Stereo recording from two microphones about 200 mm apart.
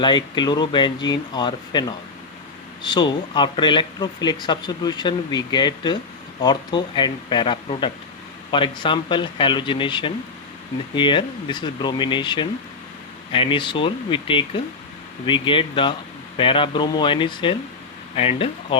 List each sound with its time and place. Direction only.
0.0 s speech: 20° left (ahead or behind)
2.8 s speech: 20° left (ahead or behind)